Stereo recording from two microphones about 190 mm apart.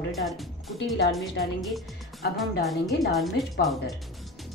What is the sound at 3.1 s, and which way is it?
Speech, centre (ahead or behind).